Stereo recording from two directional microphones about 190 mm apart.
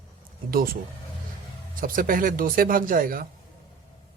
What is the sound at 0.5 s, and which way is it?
Speech, 50° right (ahead or behind).